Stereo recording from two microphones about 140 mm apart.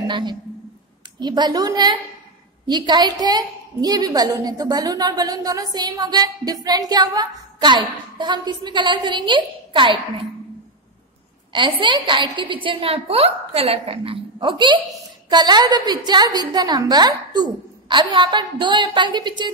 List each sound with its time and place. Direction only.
0.0 s a woman's voice: 30° right (ahead or behind)
11.5 s a woman's voice: 35° right (ahead or behind)